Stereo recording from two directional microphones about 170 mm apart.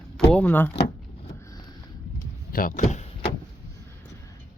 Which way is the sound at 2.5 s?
50° left (ahead or behind).